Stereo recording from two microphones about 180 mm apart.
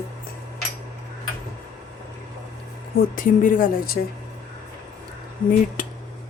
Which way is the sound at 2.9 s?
45° left (ahead or behind).